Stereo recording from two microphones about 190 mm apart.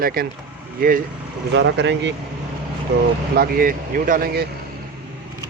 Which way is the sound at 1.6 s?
70° right (ahead or behind).